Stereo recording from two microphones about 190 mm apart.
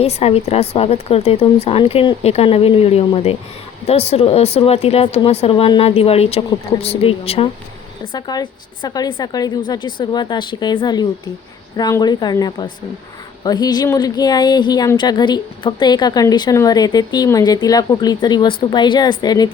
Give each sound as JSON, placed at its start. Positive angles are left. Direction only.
{"t": 0.0, "sound": "speech", "side_deg": 35}